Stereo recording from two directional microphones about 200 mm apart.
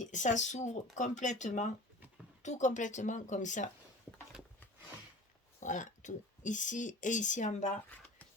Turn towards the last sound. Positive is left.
turn(degrees=35)  # may be behind; listen again after turning